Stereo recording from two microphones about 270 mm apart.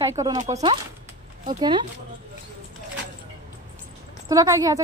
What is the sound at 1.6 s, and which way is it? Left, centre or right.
Speech, centre.